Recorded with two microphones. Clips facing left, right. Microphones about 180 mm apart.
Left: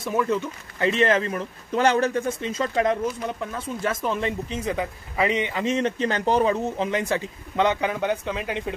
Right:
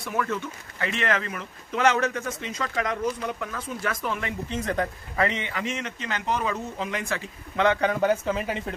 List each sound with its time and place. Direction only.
0.0 s a man's voice: 20° left (ahead or behind)
4.6 s a man's voice: 10° left (ahead or behind)
7.8 s speech: centre (ahead or behind)